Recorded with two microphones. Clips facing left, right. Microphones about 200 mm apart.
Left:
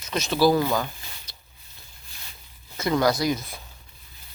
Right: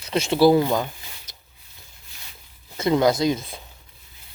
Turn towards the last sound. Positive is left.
turn(degrees=-25)  # may be behind; listen again after turning